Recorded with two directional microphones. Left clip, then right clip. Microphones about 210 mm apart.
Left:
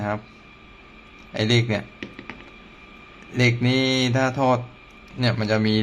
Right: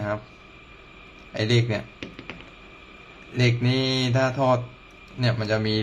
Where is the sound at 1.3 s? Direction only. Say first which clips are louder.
Left 2 dB; 15° left (ahead or behind).